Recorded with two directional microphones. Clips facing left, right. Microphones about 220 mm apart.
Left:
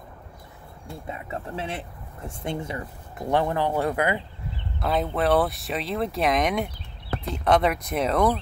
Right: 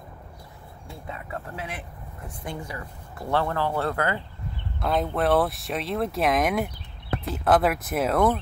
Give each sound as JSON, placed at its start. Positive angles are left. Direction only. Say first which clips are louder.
{"t": 1.0, "sound": "speech", "louder": "left 2 dB", "side_deg": 20}
{"t": 4.7, "sound": "speech", "louder": "even", "side_deg": 0}